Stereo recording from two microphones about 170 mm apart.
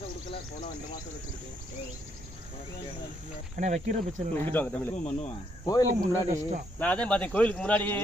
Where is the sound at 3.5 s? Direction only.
45° right (ahead or behind).